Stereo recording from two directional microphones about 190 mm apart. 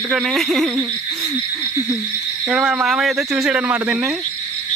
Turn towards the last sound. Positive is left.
turn(degrees=-5)  # may be behind; listen again after turning